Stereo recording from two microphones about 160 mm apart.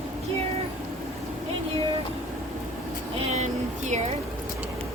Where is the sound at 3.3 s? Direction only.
45° right (ahead or behind).